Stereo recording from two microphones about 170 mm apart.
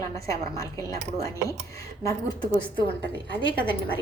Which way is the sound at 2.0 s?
20° left (ahead or behind).